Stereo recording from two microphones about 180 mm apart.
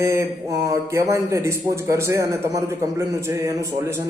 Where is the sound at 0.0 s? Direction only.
15° right (ahead or behind).